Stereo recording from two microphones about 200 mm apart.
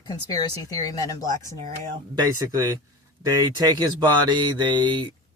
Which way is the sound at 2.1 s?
20° right (ahead or behind).